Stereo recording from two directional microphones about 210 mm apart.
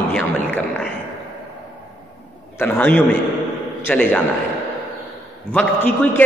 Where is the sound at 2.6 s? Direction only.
10° left (ahead or behind).